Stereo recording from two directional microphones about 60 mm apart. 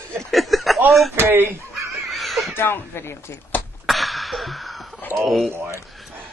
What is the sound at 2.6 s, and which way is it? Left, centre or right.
Speech, left.